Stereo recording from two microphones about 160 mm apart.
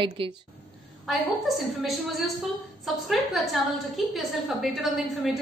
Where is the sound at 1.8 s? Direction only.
Centre (ahead or behind).